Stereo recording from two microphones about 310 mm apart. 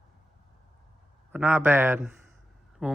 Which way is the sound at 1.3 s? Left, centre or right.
Centre.